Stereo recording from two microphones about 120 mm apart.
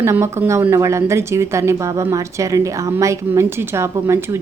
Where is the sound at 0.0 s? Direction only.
20° right (ahead or behind).